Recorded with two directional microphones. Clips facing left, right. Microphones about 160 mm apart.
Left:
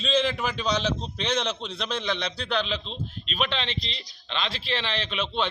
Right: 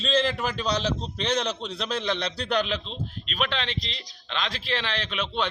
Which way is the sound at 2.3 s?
40° right (ahead or behind).